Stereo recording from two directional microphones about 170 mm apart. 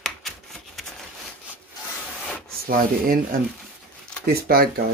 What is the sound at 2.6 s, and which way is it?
Speech, 55° right (ahead or behind).